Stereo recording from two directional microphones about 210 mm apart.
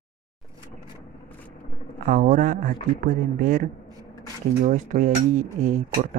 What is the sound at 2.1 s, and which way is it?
Speech, 40° right (ahead or behind).